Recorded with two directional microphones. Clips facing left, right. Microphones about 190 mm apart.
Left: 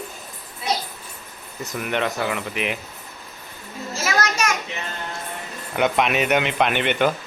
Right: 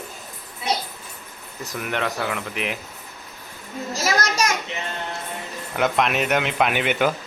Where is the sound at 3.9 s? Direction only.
40° right (ahead or behind).